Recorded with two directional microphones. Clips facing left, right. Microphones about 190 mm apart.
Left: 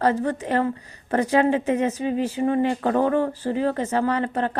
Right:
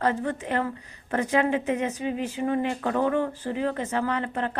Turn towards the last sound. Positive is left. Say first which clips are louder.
# left 4 dB
turn(degrees=35)  # may be behind; listen again after turning